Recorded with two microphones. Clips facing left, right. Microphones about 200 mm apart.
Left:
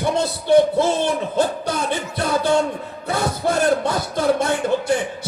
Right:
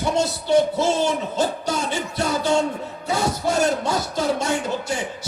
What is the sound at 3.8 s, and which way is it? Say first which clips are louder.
Music: left 3 dB; 55° left (ahead or behind).